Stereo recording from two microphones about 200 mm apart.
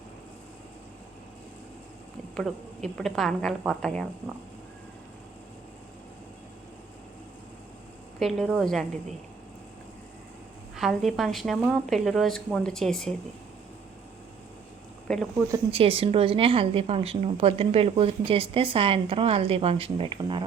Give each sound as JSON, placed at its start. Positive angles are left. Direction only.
{"t": 2.3, "sound": "a woman's voice", "side_deg": 5}
{"t": 8.2, "sound": "a woman's voice", "side_deg": 0}
{"t": 10.8, "sound": "a woman's voice", "side_deg": 0}
{"t": 15.0, "sound": "speech", "side_deg": 0}
{"t": 15.5, "sound": "speech", "side_deg": -30}